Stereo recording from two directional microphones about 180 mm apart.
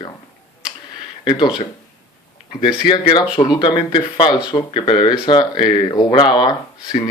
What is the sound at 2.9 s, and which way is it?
Speech, 25° left (ahead or behind).